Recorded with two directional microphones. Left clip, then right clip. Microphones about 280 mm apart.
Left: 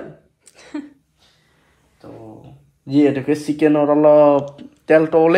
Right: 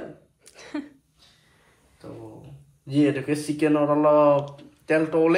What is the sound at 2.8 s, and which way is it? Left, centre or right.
Speech, left.